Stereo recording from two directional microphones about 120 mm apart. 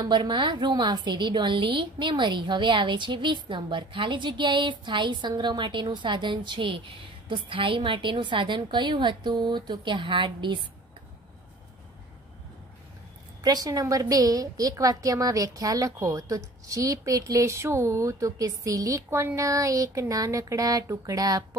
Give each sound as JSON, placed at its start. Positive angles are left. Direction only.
{"t": 0.0, "sound": "a woman's voice", "side_deg": -40}
{"t": 13.4, "sound": "a woman's voice", "side_deg": -30}